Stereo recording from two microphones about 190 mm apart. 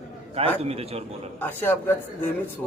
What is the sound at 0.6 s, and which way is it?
Speech, 30° right (ahead or behind).